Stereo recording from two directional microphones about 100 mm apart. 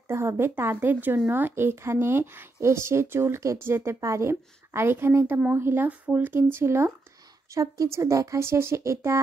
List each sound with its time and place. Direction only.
0.1 s speech: 25° right (ahead or behind)